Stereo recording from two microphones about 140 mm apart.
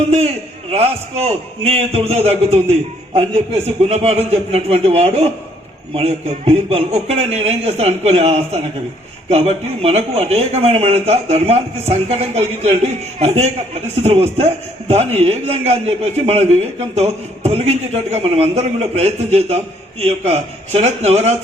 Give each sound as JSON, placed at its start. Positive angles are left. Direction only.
{"t": 0.7, "sound": "a man's voice", "side_deg": -50}
{"t": 3.8, "sound": "a man's voice", "side_deg": -50}